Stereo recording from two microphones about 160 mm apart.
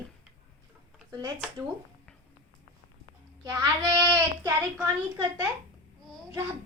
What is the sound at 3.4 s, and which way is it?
Speech, 25° right (ahead or behind).